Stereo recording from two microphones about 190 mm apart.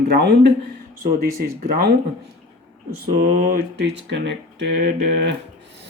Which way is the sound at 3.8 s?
65° right (ahead or behind).